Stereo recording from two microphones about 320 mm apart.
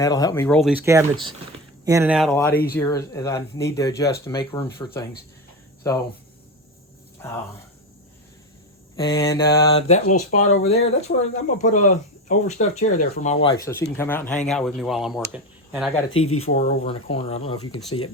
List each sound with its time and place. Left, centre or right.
0.0 s speech: centre
7.2 s speech: centre
9.0 s speech: centre
16.4 s speech: centre